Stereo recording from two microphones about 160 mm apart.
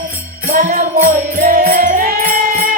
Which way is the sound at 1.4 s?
65° right (ahead or behind).